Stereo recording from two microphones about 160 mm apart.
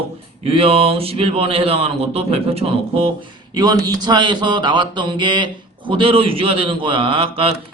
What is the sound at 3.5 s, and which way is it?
Speech, 25° right (ahead or behind).